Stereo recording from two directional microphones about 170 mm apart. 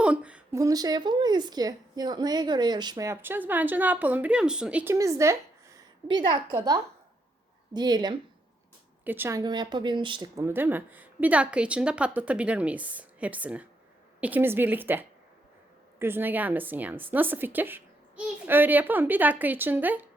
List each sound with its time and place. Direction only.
0.0 s a sound: 5° right (ahead or behind)
0.5 s a woman's voice: 20° right (ahead or behind)
9.0 s a woman's voice: 10° right (ahead or behind)
9.4 s a woman's voice: 25° right (ahead or behind)
10.4 s a woman's voice: 10° right (ahead or behind)